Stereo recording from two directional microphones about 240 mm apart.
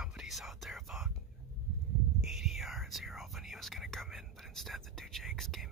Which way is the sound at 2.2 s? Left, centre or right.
Centre.